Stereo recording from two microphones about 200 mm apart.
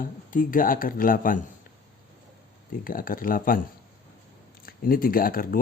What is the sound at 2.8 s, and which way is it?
Speech, 45° left (ahead or behind).